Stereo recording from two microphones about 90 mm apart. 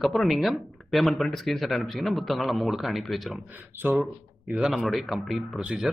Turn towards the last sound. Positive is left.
turn(degrees=-10)  # may be behind; listen again after turning